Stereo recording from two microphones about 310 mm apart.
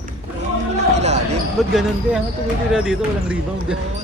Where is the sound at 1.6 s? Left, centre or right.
Centre.